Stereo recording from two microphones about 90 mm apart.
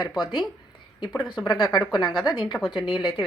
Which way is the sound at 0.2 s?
50° left (ahead or behind).